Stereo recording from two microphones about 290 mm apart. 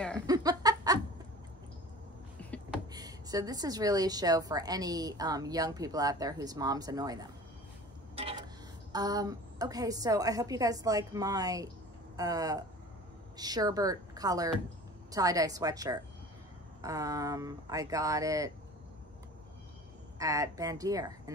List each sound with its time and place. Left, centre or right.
0.3 s a sound: centre
2.9 s a woman's voice: centre
8.2 s vehicle: centre
8.9 s a woman's voice: centre
20.2 s a woman's voice: centre